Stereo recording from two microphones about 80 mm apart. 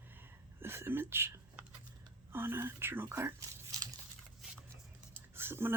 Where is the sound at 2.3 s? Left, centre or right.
Right.